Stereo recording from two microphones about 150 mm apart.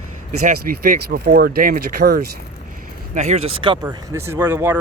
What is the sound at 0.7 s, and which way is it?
Speech, 65° right (ahead or behind).